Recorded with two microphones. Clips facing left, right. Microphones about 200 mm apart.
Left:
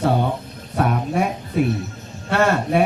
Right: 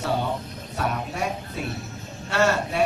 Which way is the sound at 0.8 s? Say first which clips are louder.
Left 7 dB; 55° left (ahead or behind).